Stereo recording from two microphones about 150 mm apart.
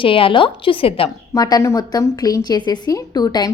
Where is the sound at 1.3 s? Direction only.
25° left (ahead or behind).